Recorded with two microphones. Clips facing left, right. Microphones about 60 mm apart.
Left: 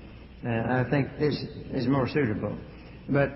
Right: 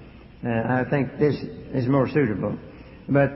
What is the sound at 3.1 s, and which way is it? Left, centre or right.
Speech, centre.